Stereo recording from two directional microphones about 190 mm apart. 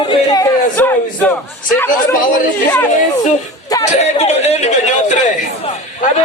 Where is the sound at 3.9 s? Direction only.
35° left (ahead or behind).